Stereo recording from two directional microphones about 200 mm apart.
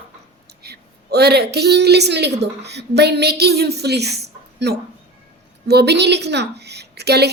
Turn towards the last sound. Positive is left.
turn(degrees=-55)  # may be behind; listen again after turning